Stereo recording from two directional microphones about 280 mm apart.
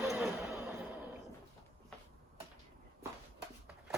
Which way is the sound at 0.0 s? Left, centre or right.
Centre.